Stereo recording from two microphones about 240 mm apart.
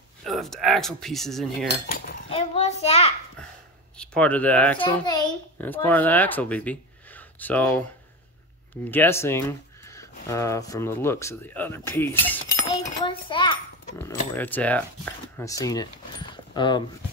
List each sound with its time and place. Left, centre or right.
0.2 s speech: centre
1.7 s speech: left
2.2 s a child's voice: left
3.9 s speech: centre
4.8 s speech: centre
5.6 s speech: centre
8.9 s speech: centre
12.6 s a sound: centre
14.3 s speech: centre